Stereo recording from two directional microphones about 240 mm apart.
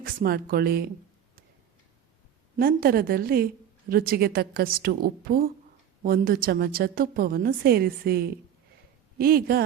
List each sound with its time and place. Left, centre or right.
0.0 s a woman's voice: right
2.6 s a woman's voice: right